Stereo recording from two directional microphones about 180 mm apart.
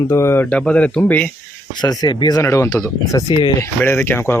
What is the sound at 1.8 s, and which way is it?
Speech, 25° left (ahead or behind).